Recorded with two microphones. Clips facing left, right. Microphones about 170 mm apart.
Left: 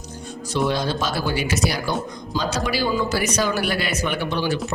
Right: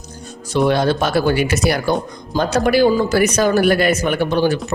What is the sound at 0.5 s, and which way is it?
A man's voice, 60° right (ahead or behind).